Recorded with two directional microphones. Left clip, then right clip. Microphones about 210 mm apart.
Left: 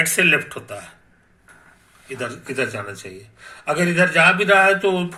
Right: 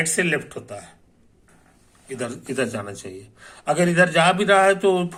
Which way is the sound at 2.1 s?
20° right (ahead or behind).